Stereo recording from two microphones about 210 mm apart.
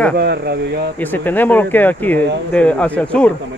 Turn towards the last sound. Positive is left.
turn(degrees=5)  # may be behind; listen again after turning